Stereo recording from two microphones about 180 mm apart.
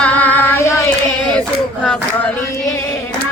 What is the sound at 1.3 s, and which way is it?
Hands, 5° left (ahead or behind).